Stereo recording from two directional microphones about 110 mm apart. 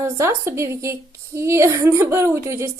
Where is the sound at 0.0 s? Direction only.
25° right (ahead or behind).